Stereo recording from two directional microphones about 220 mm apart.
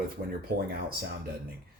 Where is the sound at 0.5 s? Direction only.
45° right (ahead or behind).